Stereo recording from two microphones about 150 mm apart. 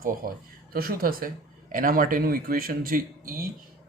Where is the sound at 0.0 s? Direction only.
70° right (ahead or behind).